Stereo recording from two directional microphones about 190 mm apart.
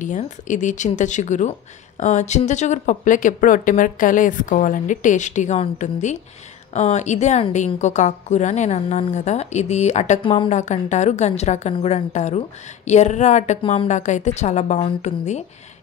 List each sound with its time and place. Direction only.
0.0 s a woman's voice: 40° left (ahead or behind)